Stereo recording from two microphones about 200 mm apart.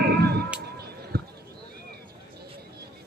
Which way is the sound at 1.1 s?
50° right (ahead or behind).